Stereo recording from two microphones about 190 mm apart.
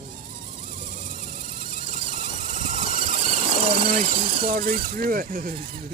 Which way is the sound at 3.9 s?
45° right (ahead or behind).